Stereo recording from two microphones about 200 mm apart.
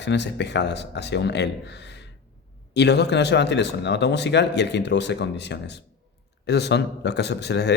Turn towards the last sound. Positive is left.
turn(degrees=60)  # may be behind; listen again after turning